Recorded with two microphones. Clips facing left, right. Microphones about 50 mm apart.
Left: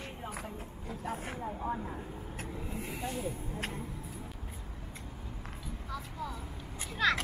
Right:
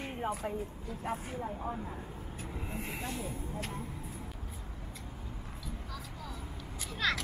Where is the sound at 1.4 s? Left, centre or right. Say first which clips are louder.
Left 2 dB; centre.